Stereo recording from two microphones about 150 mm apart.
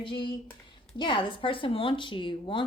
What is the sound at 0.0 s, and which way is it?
Speech, 30° left (ahead or behind).